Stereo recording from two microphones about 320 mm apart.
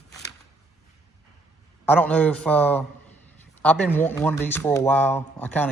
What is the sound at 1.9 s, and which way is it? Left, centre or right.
Speech, centre.